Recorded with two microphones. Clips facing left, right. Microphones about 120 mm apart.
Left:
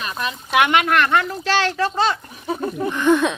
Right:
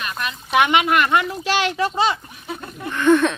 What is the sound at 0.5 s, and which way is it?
Speech, centre (ahead or behind).